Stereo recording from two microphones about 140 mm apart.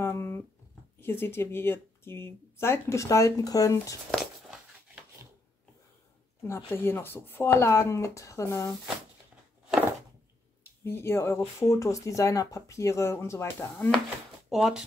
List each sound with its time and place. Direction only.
0.0 s a sound: 20° left (ahead or behind)
1.0 s speech: 15° left (ahead or behind)
4.1 s a sound: 5° right (ahead or behind)
6.4 s speech: 20° left (ahead or behind)
10.8 s speech: 15° left (ahead or behind)
13.7 s speech: 5° left (ahead or behind)